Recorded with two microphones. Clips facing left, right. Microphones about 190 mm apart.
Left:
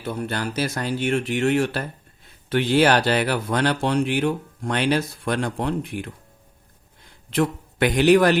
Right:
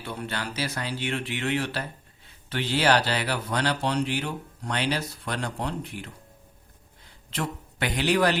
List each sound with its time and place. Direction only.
0.0 s speech: 45° left (ahead or behind)
7.3 s a man's voice: 55° left (ahead or behind)